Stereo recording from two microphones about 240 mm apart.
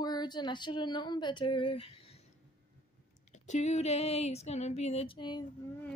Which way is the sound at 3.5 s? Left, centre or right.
Left.